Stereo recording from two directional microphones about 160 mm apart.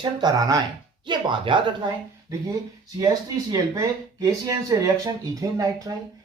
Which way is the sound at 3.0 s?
20° right (ahead or behind).